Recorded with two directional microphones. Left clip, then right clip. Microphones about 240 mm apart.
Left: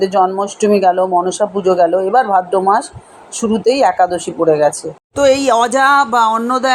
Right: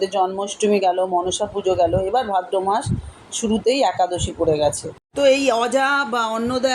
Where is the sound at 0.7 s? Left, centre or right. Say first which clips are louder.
Left 7 dB; left.